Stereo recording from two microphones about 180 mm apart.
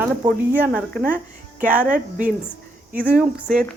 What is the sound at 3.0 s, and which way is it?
Speech, 5° right (ahead or behind).